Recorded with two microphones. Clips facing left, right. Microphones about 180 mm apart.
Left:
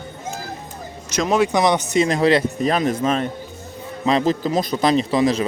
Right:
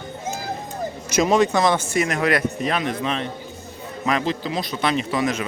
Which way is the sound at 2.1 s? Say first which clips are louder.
Left 5 dB; 30° left (ahead or behind).